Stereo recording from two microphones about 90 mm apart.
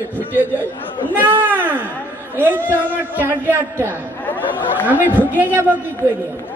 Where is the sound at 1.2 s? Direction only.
20° right (ahead or behind).